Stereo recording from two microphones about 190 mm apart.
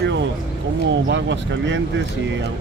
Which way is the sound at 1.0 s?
70° right (ahead or behind).